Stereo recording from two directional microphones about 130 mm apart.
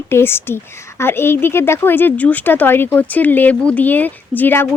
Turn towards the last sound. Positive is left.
turn(degrees=15)  # may be behind; listen again after turning